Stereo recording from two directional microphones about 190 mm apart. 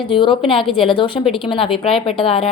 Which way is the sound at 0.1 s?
25° left (ahead or behind).